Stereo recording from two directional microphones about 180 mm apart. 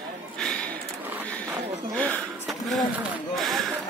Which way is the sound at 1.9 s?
10° left (ahead or behind).